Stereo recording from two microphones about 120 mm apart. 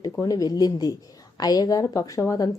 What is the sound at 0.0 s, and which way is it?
A woman's voice, 30° left (ahead or behind).